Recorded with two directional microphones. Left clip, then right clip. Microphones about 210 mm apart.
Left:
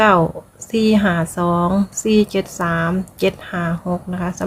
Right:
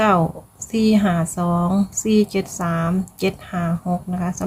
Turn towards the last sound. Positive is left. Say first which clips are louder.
# left 1 dB
turn(degrees=5)  # may be behind; listen again after turning